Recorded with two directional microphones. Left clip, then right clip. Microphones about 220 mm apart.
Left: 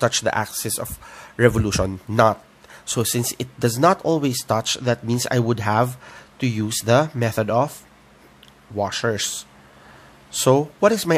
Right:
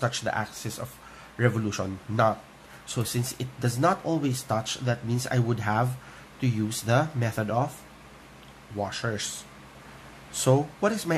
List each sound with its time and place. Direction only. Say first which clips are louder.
0.0 s speech: left 8 dB; 50° left (ahead or behind)
8.7 s speech: left 8 dB; 50° left (ahead or behind)